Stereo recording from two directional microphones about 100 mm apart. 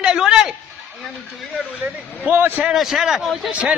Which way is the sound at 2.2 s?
20° right (ahead or behind).